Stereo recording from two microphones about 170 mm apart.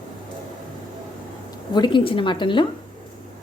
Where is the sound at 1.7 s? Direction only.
25° left (ahead or behind).